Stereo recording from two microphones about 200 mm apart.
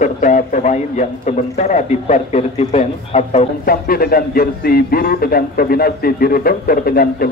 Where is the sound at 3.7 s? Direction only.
50° left (ahead or behind).